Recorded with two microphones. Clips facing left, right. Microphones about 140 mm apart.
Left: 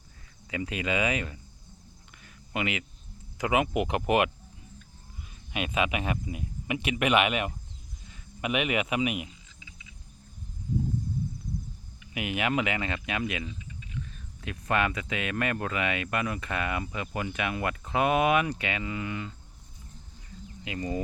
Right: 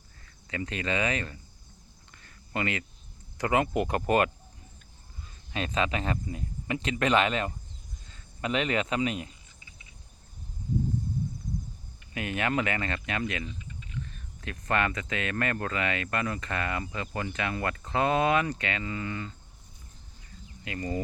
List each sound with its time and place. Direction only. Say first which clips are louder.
0.5 s speech: left 1 dB; 10° left (ahead or behind)
2.2 s a sound: even; 10° left (ahead or behind)
3.3 s speech: even; 10° left (ahead or behind)
5.5 s speech: even; 15° left (ahead or behind)
9.6 s cricket: left 3 dB; 90° left
12.1 s speech: left 1 dB; 15° left (ahead or behind)
20.7 s speech: left 1 dB; 15° left (ahead or behind)